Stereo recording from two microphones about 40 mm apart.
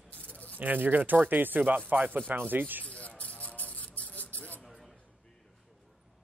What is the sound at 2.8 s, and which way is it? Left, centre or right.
Music, left.